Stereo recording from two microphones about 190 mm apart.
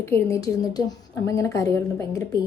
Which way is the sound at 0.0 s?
15° left (ahead or behind).